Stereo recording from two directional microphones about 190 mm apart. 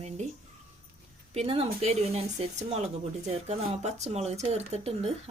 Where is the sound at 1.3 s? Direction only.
30° right (ahead or behind).